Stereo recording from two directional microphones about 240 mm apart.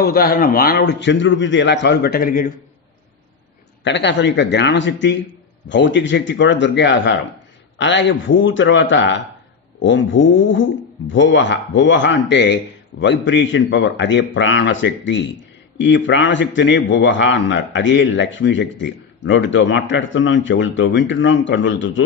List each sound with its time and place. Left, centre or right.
0.0 s a man's voice: left
3.8 s a man's voice: left